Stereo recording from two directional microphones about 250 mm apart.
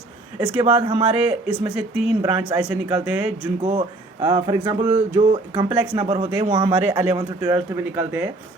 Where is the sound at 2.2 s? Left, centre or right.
Centre.